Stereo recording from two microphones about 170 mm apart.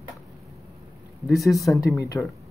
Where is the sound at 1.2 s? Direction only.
Centre (ahead or behind).